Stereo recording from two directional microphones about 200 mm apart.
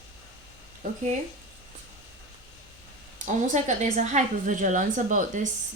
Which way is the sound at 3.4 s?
35° right (ahead or behind).